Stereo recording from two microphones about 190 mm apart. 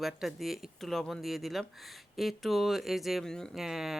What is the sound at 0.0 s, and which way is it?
Speech, centre (ahead or behind).